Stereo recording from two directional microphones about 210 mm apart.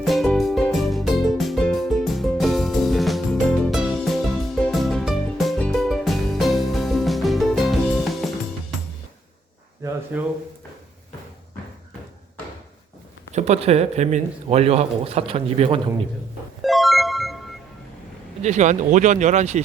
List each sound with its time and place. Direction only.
0.0 s music: centre (ahead or behind)
10.1 s a sound: 10° right (ahead or behind)
13.3 s speech: 30° right (ahead or behind)
16.6 s music: centre (ahead or behind)
18.4 s speech: 35° right (ahead or behind)